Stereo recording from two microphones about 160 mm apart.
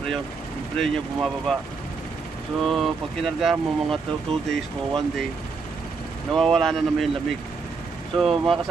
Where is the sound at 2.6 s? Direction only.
Centre (ahead or behind).